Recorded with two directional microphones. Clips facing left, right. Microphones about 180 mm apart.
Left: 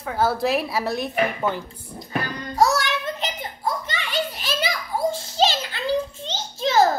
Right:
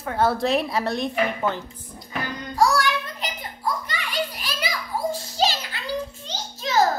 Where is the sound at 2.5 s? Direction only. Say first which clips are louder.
Even; 20° left (ahead or behind).